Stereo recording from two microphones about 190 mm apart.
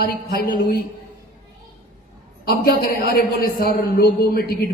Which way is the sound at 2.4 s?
55° left (ahead or behind).